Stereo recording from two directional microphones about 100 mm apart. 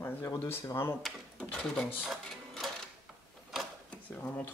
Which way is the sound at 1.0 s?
10° left (ahead or behind).